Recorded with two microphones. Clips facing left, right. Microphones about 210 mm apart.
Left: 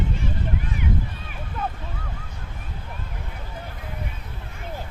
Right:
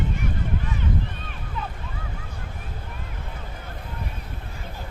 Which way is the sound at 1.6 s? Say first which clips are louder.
Left 4 dB; 50° left (ahead or behind).